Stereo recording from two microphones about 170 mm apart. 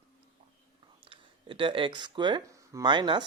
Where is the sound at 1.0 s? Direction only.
30° right (ahead or behind).